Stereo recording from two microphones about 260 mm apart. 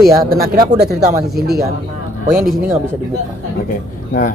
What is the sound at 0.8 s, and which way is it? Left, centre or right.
Speech, right.